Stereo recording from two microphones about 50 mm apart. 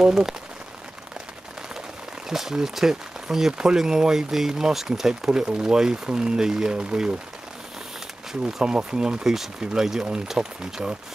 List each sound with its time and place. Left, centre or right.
0.0 s speech: centre
2.2 s speech: centre
8.3 s speech: centre